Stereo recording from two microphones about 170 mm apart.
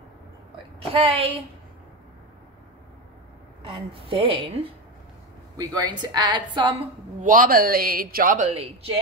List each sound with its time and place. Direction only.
0.7 s a woman's voice: 35° right (ahead or behind)
3.6 s a woman's voice: 35° right (ahead or behind)
5.8 s a woman's voice: 25° right (ahead or behind)
7.2 s speech: 50° right (ahead or behind)
8.5 s a woman's voice: 35° right (ahead or behind)